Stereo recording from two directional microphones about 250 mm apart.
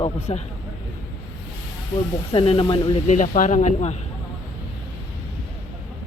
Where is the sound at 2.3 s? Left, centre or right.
Left.